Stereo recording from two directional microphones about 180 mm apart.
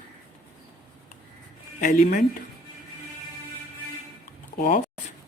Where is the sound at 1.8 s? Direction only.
50° left (ahead or behind).